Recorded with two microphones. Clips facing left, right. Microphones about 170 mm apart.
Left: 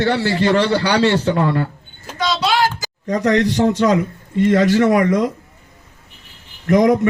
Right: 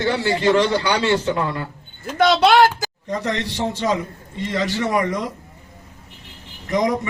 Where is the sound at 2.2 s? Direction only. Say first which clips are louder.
Right 4 dB; 55° right (ahead or behind).